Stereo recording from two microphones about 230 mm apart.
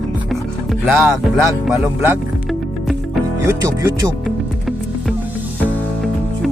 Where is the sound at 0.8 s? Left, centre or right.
Centre.